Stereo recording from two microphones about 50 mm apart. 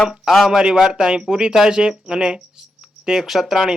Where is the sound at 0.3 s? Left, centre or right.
Centre.